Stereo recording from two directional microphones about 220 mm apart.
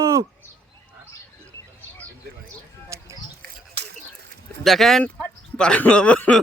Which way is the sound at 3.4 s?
50° right (ahead or behind).